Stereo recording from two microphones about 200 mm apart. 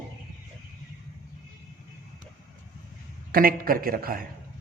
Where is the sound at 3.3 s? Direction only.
45° right (ahead or behind).